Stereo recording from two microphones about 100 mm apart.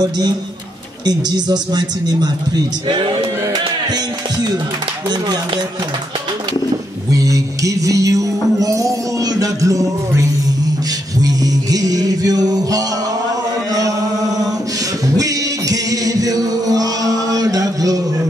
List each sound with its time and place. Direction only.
1.0 s a man's voice: 45° right (ahead or behind)
3.9 s music: 40° right (ahead or behind)
7.1 s music: 35° right (ahead or behind)
13.7 s chant: 35° right (ahead or behind)
15.1 s music: 35° right (ahead or behind)